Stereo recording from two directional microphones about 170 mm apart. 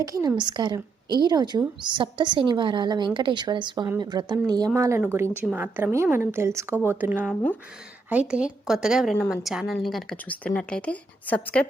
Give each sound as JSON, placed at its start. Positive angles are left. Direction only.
{"t": 0.0, "sound": "a woman's voice", "side_deg": -20}